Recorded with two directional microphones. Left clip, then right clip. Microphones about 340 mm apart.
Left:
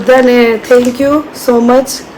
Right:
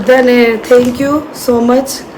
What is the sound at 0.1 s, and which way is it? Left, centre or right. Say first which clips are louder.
Speech: left 1 dB; centre.